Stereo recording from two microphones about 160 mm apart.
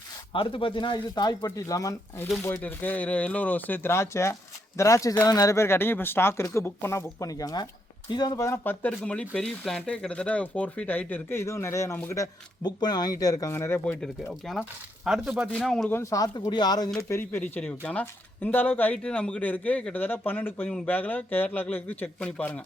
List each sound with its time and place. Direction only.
0.3 s speech: 35° left (ahead or behind); by 14.3 s 10° left (ahead or behind)
14.4 s speech: centre (ahead or behind)
16.0 s speech: 20° left (ahead or behind)
17.1 s speech: 15° left (ahead or behind)